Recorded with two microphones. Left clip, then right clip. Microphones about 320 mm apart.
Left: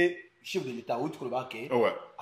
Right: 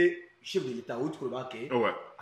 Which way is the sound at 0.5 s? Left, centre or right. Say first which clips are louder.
Left 1 dB; centre.